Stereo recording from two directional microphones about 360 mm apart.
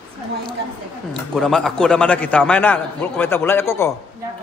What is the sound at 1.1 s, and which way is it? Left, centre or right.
A man's voice, centre.